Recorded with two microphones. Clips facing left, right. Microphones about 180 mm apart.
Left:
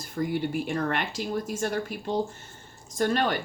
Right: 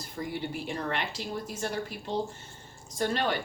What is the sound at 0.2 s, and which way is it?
Speech, 50° left (ahead or behind).